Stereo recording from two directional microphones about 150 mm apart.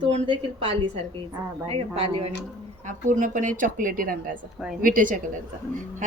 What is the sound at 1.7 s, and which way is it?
Speech, 40° right (ahead or behind).